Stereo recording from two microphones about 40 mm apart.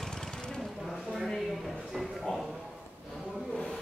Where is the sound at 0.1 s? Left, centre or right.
Centre.